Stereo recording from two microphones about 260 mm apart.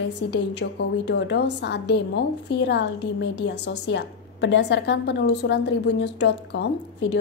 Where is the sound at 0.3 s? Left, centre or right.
Left.